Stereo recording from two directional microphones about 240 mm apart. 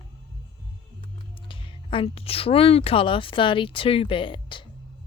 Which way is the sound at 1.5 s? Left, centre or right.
Left.